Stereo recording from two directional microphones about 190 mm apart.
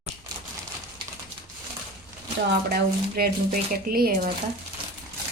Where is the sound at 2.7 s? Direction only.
55° right (ahead or behind).